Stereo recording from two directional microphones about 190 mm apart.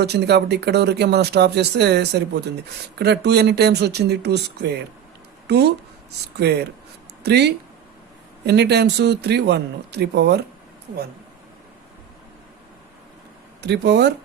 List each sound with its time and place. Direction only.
0.0 s speech: 60° right (ahead or behind)
13.6 s speech: 60° right (ahead or behind)